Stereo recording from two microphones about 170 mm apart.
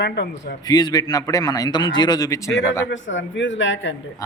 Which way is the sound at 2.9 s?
90° left.